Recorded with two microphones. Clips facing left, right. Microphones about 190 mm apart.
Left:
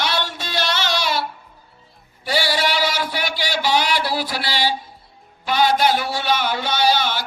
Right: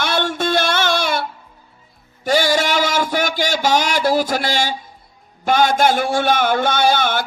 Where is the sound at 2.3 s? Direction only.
45° right (ahead or behind).